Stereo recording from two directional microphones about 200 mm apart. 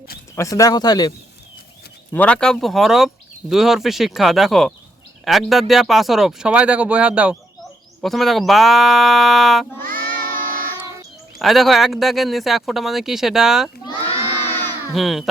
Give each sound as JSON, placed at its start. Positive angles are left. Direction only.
{"t": 0.3, "sound": "speech", "side_deg": 15}
{"t": 2.1, "sound": "speech", "side_deg": 5}
{"t": 9.8, "sound": "music", "side_deg": -45}
{"t": 11.3, "sound": "speech", "side_deg": 0}
{"t": 13.8, "sound": "crowd", "side_deg": 25}
{"t": 14.9, "sound": "speech", "side_deg": 0}